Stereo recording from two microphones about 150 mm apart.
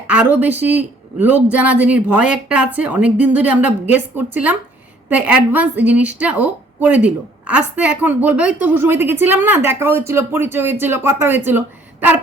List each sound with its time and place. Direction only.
0.1 s a woman's voice: 10° right (ahead or behind)